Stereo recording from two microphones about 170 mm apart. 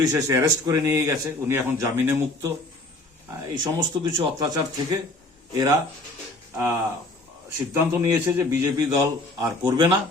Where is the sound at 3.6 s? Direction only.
25° right (ahead or behind).